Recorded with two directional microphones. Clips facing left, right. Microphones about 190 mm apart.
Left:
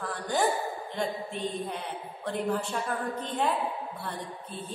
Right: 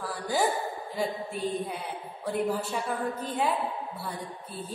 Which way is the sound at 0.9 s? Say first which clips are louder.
Right 2 dB; 5° right (ahead or behind).